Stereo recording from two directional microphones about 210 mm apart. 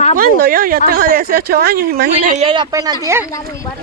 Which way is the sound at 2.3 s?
25° right (ahead or behind).